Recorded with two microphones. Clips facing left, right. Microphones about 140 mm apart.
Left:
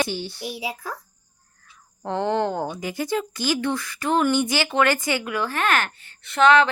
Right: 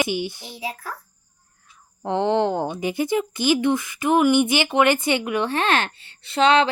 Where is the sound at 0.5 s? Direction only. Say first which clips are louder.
Right 2 dB; 15° left (ahead or behind).